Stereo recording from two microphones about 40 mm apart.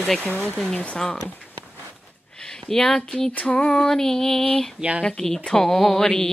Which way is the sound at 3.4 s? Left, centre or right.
Left.